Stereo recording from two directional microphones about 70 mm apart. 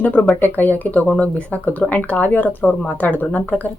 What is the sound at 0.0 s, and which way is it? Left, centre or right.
Speech, left.